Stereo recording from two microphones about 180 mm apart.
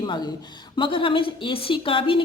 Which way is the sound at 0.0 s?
25° left (ahead or behind).